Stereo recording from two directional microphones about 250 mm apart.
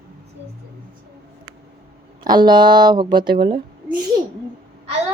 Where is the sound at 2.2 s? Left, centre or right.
Centre.